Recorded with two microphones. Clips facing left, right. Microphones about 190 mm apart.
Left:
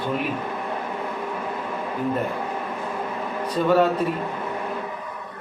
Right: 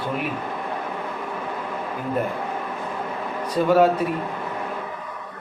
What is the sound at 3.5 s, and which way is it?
Speech, 10° right (ahead or behind).